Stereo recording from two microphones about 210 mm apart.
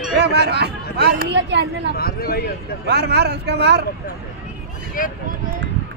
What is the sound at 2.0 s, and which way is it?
Speech, 45° left (ahead or behind).